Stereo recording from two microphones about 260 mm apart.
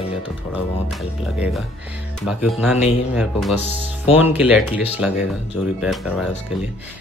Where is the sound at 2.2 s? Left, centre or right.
Centre.